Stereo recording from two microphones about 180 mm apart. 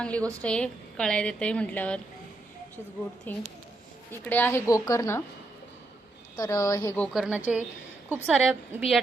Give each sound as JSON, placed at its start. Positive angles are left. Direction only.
{"t": 0.0, "sound": "a woman's voice", "side_deg": 5}
{"t": 3.3, "sound": "a woman's voice", "side_deg": 10}
{"t": 6.3, "sound": "a woman's voice", "side_deg": 15}
{"t": 7.1, "sound": "a woman's voice", "side_deg": -5}